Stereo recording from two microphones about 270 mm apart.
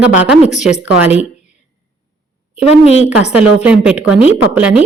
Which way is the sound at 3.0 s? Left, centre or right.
Centre.